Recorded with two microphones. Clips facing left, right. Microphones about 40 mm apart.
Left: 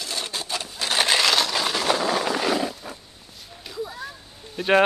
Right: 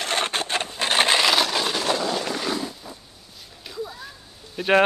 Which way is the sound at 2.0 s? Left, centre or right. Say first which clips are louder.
Left 3 dB; left.